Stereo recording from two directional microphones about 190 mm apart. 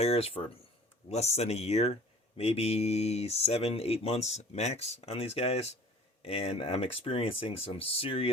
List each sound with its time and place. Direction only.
0.0 s speech: 30° left (ahead or behind)